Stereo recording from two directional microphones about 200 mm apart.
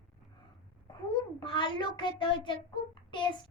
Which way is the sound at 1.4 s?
25° left (ahead or behind).